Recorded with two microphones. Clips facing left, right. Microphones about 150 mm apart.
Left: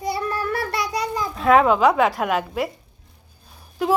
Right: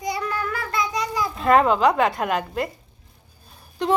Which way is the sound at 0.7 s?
75° left (ahead or behind).